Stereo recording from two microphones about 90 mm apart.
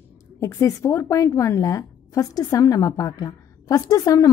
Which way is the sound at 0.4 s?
35° left (ahead or behind).